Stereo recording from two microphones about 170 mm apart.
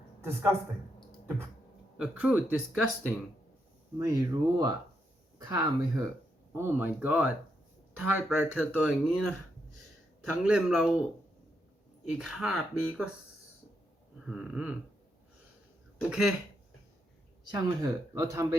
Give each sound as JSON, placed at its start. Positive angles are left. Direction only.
{"t": 0.2, "sound": "a man's voice", "side_deg": -15}
{"t": 2.0, "sound": "speech", "side_deg": -10}
{"t": 3.9, "sound": "speech", "side_deg": -20}
{"t": 10.4, "sound": "speech", "side_deg": -5}
{"t": 12.1, "sound": "speech", "side_deg": 0}
{"t": 14.3, "sound": "speech", "side_deg": -5}
{"t": 16.0, "sound": "speech", "side_deg": -5}
{"t": 17.5, "sound": "speech", "side_deg": -20}